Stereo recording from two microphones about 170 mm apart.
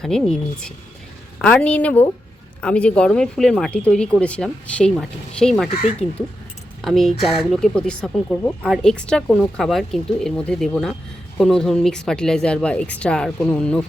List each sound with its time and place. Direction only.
0.0 s a woman's voice: 5° left (ahead or behind)
6.0 s speech: 35° left (ahead or behind)
6.8 s speech: centre (ahead or behind)